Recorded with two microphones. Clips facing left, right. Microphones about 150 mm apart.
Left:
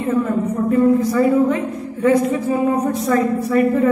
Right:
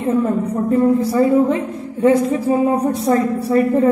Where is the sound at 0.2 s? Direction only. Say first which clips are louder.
Right 1 dB; 30° right (ahead or behind).